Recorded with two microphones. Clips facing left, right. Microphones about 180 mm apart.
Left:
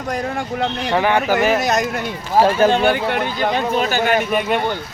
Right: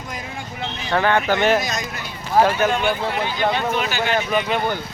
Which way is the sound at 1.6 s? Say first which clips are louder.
Left 9 dB; 65° left (ahead or behind).